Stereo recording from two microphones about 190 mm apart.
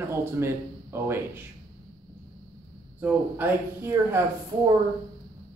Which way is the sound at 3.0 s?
10° right (ahead or behind).